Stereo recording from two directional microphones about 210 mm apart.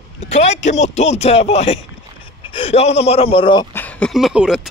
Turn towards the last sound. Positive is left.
turn(degrees=-5)  # may be behind; listen again after turning